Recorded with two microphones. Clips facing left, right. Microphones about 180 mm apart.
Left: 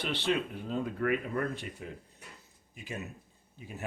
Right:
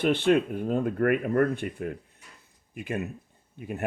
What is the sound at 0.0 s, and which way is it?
Speech, 50° right (ahead or behind).